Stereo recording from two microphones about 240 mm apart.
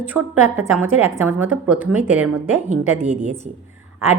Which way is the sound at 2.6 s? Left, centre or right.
Right.